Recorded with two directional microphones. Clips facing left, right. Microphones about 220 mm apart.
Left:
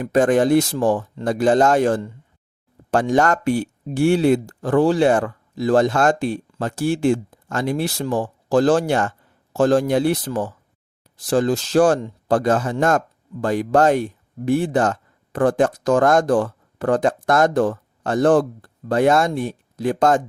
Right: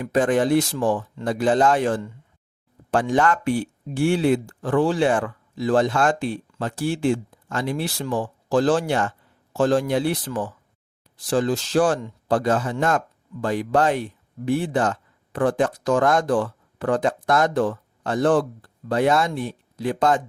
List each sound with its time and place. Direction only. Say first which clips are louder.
0.0 s speech: left 4 dB; 45° left (ahead or behind)